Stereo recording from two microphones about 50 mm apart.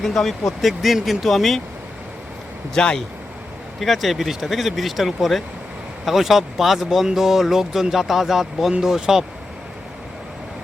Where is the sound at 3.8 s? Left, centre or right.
Centre.